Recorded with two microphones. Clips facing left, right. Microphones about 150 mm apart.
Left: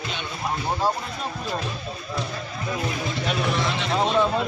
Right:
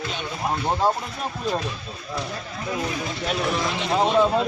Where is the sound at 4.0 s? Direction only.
10° right (ahead or behind).